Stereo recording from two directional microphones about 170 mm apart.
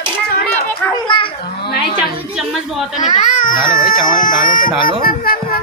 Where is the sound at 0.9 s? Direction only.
30° left (ahead or behind).